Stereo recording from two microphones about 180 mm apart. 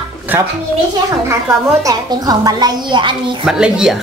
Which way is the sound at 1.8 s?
20° right (ahead or behind).